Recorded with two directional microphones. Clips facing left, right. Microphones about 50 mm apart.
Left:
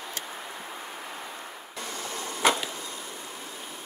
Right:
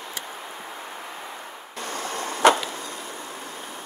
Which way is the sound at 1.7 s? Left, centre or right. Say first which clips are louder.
Right 5 dB; right.